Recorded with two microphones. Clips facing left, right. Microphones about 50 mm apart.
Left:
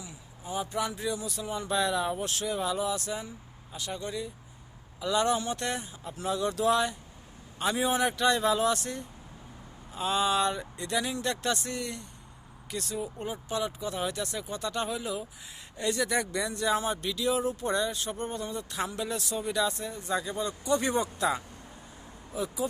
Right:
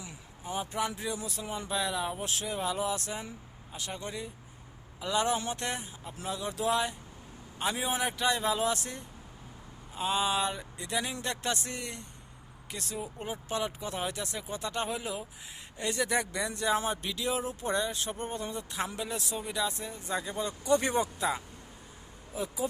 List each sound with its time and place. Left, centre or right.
0.0 s a sound: right
0.6 s speech: right
1.7 s speech: centre
2.4 s speech: right
6.2 s speech: centre
11.0 s speech: right
21.2 s speech: centre